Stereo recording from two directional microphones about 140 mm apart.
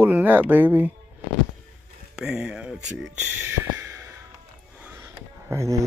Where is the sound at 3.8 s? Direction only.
20° right (ahead or behind).